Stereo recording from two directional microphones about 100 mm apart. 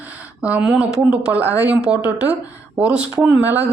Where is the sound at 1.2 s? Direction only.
15° right (ahead or behind).